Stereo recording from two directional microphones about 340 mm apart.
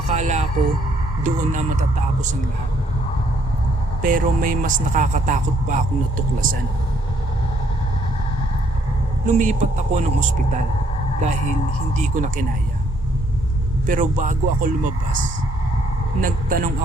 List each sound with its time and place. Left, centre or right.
0.1 s a sound: centre
1.2 s speech: right
4.0 s speech: right
9.2 s speech: right
13.8 s speech: right
16.2 s speech: right